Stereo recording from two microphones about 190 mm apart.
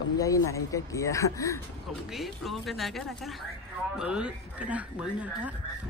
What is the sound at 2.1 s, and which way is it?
Speech, centre (ahead or behind).